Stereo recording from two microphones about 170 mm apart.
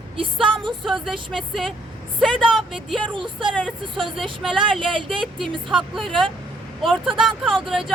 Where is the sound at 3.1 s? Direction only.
30° right (ahead or behind).